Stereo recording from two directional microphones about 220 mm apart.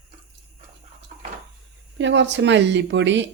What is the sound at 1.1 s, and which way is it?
Cupboard open or close, 35° right (ahead or behind).